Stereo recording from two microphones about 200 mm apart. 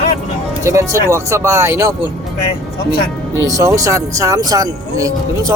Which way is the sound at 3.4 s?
15° right (ahead or behind).